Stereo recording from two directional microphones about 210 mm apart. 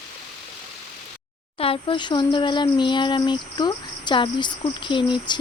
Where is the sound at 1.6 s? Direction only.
25° left (ahead or behind).